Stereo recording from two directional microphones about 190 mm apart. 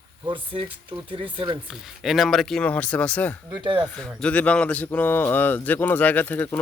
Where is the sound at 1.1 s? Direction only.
25° right (ahead or behind).